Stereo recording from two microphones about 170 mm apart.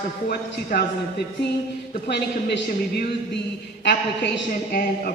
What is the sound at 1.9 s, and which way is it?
A man's voice, 75° left (ahead or behind).